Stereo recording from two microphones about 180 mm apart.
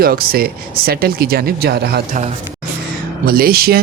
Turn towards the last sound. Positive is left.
turn(degrees=-60)  # may be behind; listen again after turning